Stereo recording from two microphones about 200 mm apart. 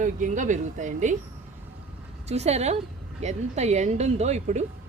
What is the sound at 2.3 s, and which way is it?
Speech, 30° right (ahead or behind).